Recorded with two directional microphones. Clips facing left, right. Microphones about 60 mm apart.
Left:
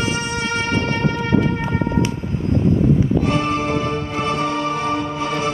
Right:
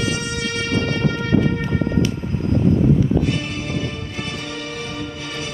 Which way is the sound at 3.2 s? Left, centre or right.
Left.